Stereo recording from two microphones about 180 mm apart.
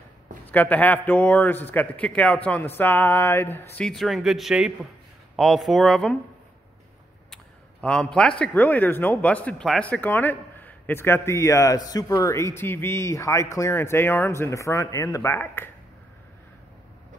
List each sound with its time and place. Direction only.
0.5 s a man's voice: 10° left (ahead or behind)
7.8 s a man's voice: 5° left (ahead or behind)